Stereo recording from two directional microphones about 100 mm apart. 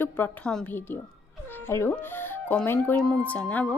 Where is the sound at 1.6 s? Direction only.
25° left (ahead or behind).